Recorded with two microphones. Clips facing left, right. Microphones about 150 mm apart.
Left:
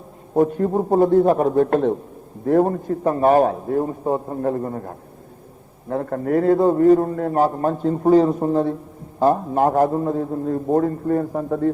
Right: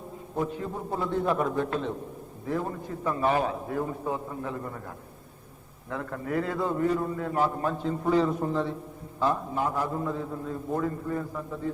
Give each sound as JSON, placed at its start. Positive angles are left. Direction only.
{"t": 0.3, "sound": "a man's voice", "side_deg": 50}